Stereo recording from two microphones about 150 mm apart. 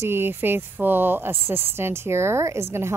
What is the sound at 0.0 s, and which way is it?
Speech, 15° right (ahead or behind).